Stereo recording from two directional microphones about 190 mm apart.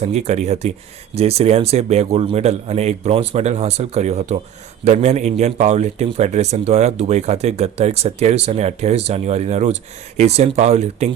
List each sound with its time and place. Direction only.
0.0 s a man's voice: 35° right (ahead or behind)